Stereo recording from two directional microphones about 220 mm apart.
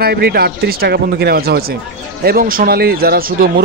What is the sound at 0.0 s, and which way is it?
Speech, 45° right (ahead or behind).